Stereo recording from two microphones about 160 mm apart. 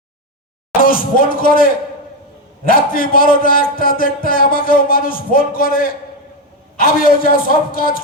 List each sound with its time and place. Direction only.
0.8 s speech: 65° left (ahead or behind)
2.6 s a man's voice: 65° left (ahead or behind)